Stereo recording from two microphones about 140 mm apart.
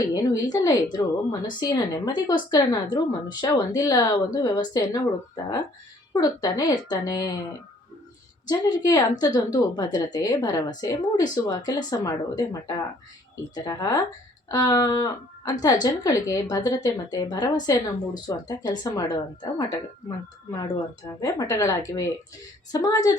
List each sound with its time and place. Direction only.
0.1 s speech: 25° left (ahead or behind)
6.1 s speech: 25° left (ahead or behind)
8.4 s speech: 25° left (ahead or behind)